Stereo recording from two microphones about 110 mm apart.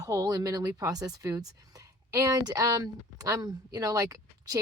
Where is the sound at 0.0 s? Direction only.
30° right (ahead or behind).